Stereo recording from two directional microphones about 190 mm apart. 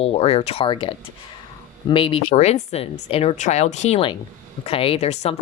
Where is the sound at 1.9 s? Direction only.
25° left (ahead or behind).